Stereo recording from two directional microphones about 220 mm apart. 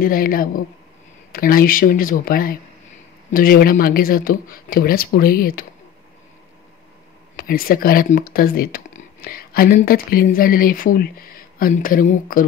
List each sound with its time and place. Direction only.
0.0 s speech: 40° left (ahead or behind)
7.3 s speech: 40° left (ahead or behind)